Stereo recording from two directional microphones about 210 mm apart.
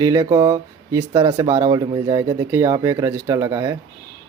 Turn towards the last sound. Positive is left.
turn(degrees=-15)  # may be behind; listen again after turning